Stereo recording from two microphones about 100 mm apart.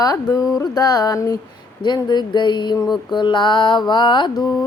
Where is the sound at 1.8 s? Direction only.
50° left (ahead or behind).